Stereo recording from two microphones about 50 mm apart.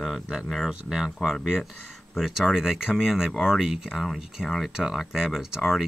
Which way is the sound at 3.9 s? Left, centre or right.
Centre.